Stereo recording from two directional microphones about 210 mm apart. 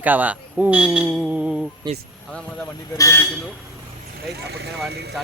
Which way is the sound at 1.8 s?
20° right (ahead or behind).